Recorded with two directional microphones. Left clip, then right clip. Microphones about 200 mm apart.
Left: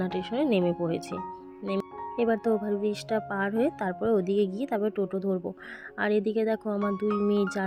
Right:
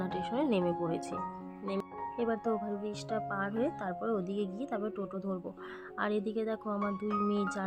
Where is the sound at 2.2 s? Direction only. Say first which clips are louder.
Left 7 dB; 30° left (ahead or behind).